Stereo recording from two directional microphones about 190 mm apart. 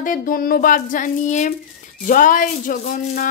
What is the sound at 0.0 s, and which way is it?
Speech, 45° left (ahead or behind).